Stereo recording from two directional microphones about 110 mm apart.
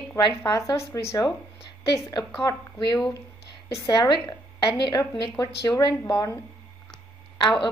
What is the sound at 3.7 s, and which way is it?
A woman's voice, 35° left (ahead or behind).